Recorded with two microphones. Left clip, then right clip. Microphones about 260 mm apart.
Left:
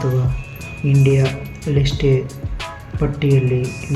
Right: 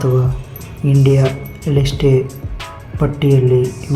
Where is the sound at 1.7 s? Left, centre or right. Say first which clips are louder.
Right 3 dB; centre.